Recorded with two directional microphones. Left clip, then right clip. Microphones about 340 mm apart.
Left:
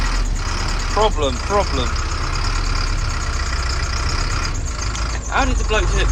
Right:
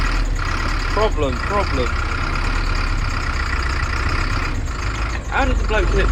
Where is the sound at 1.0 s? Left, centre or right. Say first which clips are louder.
Left 2 dB; centre.